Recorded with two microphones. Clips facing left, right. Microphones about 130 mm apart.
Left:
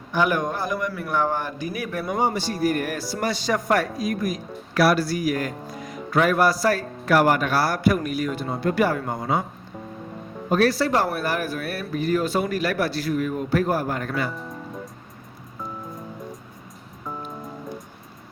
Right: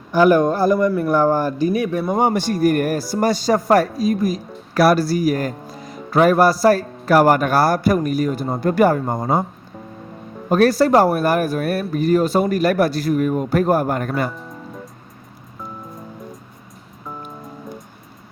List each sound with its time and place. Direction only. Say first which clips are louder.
0.1 s speech: right 9 dB; 35° right (ahead or behind)
2.1 s speech: right 4 dB; 55° right (ahead or behind); by 4.4 s 30° right (ahead or behind)
4.7 s speech: right 5 dB; 40° right (ahead or behind)
10.5 s speech: right 6 dB; 45° right (ahead or behind)